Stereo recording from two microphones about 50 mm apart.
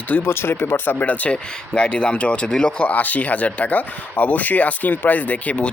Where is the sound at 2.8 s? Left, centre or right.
Left.